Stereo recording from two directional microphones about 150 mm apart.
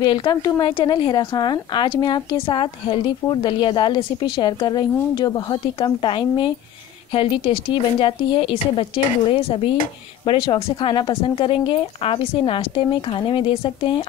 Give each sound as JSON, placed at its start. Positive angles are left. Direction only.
{"t": 0.0, "sound": "a woman's voice", "side_deg": 30}